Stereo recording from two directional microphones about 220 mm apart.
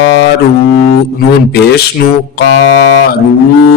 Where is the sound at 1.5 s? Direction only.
45° left (ahead or behind).